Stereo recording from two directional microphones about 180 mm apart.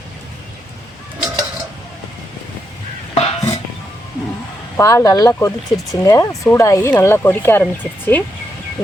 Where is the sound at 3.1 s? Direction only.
35° left (ahead or behind).